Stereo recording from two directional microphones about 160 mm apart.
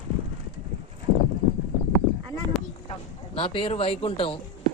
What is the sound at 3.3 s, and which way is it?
Speech, 35° left (ahead or behind).